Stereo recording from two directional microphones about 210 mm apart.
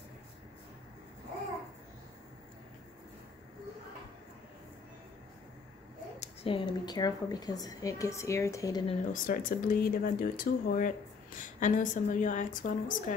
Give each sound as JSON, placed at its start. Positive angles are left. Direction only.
{"t": 6.1, "sound": "a woman's voice", "side_deg": 30}
{"t": 9.1, "sound": "speech", "side_deg": 40}